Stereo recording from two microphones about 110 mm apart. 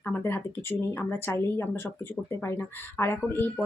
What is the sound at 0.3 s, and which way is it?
Speech, 20° left (ahead or behind).